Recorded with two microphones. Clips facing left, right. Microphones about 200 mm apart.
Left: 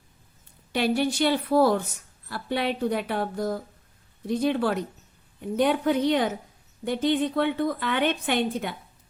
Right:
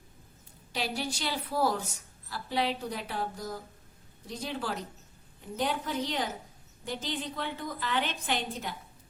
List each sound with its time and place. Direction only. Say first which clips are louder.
0.7 s a woman's voice: left 10 dB; 60° left (ahead or behind)